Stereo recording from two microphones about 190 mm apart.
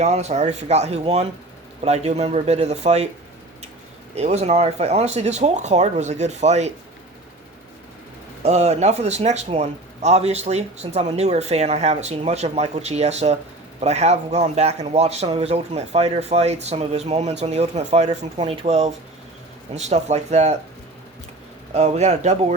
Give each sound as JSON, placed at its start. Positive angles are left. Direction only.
{"t": 0.0, "sound": "speech", "side_deg": -35}
{"t": 4.1, "sound": "speech", "side_deg": -35}
{"t": 8.4, "sound": "speech", "side_deg": -35}
{"t": 21.7, "sound": "speech", "side_deg": -35}